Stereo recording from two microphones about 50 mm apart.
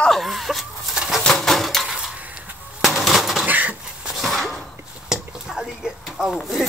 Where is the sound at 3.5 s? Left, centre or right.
Right.